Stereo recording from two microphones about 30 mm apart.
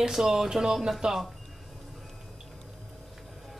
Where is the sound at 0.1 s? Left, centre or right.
Centre.